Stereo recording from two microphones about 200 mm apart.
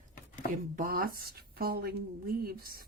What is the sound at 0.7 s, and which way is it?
A woman's voice, 45° right (ahead or behind).